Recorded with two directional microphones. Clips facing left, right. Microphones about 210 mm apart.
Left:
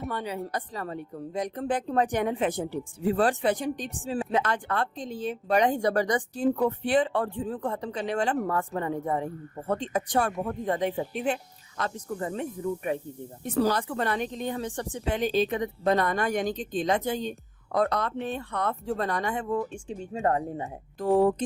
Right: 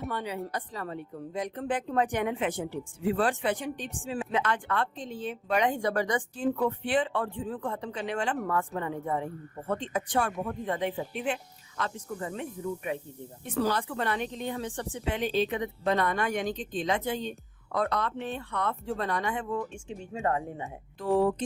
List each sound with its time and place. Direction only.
0.1 s speech: 40° left (ahead or behind)